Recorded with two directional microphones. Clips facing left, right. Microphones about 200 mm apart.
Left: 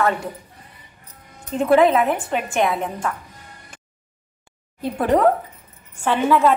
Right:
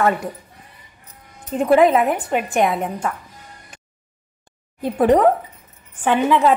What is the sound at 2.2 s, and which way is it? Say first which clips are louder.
Speech: right 2 dB; 15° right (ahead or behind).